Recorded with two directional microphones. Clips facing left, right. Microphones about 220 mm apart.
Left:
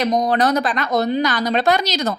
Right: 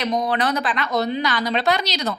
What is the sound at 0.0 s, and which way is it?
A woman's voice, 40° left (ahead or behind).